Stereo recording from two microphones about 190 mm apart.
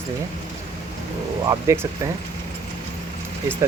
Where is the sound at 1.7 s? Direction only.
15° right (ahead or behind).